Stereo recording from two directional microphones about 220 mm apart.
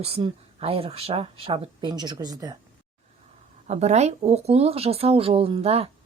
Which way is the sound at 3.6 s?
30° right (ahead or behind).